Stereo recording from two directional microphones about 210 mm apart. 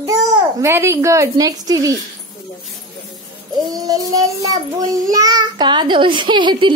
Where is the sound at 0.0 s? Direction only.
15° right (ahead or behind).